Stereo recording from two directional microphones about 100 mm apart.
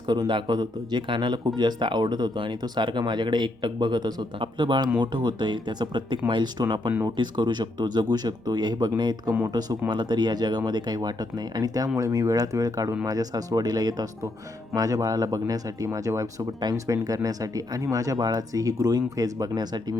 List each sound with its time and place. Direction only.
0.1 s speech: 50° right (ahead or behind)